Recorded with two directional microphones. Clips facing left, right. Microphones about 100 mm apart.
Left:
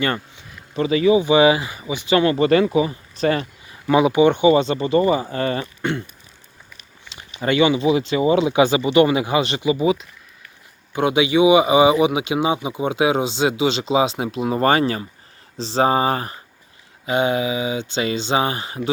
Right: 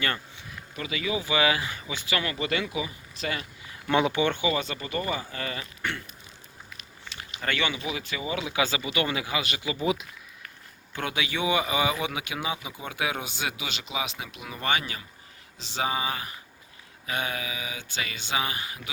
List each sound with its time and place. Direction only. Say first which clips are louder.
0.8 s speech: left 15 dB; 35° left (ahead or behind)
2.1 s speech: left 14 dB; 35° left (ahead or behind)
3.8 s speech: left 9 dB; 10° left (ahead or behind); by 5.5 s 35° left (ahead or behind)
5.8 s speech: left 9 dB; 20° left (ahead or behind)
7.1 s speech: left 10 dB; 20° left (ahead or behind)
9.8 s speech: left 5 dB; centre (ahead or behind)
10.9 s speech: left 14 dB; 20° left (ahead or behind); by 16.4 s 40° left (ahead or behind)
17.1 s speech: left 12 dB; 25° left (ahead or behind)